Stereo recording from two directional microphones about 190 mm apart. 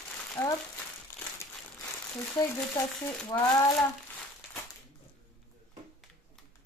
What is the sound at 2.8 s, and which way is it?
Frying, 15° left (ahead or behind).